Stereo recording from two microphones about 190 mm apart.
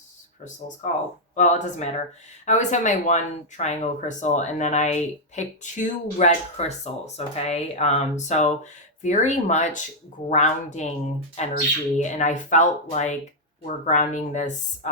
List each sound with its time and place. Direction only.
0.8 s speech: 40° left (ahead or behind)